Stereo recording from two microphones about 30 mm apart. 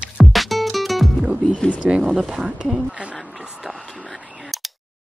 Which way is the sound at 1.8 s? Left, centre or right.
Right.